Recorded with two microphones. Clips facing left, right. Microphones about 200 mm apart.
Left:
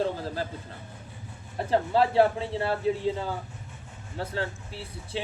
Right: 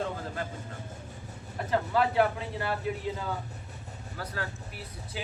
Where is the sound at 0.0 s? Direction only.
30° left (ahead or behind).